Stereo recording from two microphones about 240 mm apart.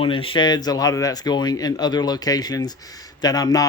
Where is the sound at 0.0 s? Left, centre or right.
Left.